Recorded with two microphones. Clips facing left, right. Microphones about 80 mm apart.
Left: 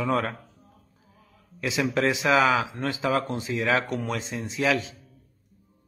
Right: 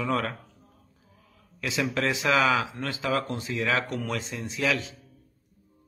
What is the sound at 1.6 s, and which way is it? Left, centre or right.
Mantra, centre.